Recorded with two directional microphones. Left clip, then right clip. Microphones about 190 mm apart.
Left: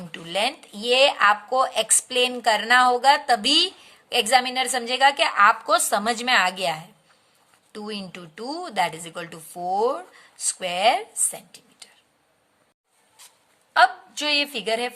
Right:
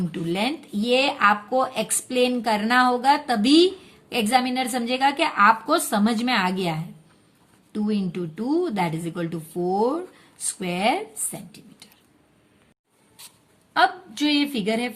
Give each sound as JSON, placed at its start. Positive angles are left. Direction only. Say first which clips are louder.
{"t": 0.1, "sound": "speech", "louder": "left 3 dB", "side_deg": 30}
{"t": 13.7, "sound": "a woman's voice", "louder": "left 2 dB", "side_deg": 20}